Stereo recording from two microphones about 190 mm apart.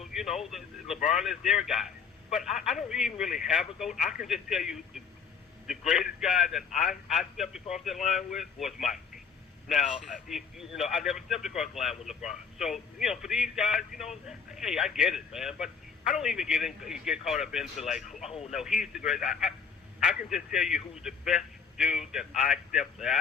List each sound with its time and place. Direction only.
0.0 s a man's voice: centre (ahead or behind)
13.9 s speech: 35° left (ahead or behind)
14.3 s a man's voice: 5° right (ahead or behind)
18.3 s speech: 30° left (ahead or behind)
18.5 s a man's voice: 5° right (ahead or behind)